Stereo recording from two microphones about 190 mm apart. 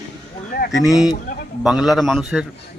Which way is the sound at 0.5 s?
65° left (ahead or behind).